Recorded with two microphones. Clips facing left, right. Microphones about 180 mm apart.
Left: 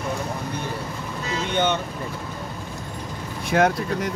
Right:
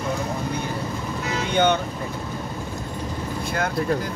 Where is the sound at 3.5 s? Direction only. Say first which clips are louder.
Left 4 dB; 80° left.